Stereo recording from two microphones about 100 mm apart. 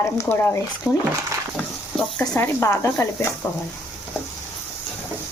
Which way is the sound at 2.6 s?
30° left (ahead or behind).